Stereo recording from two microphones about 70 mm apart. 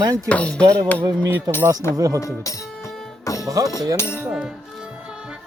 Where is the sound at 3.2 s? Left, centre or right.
Left.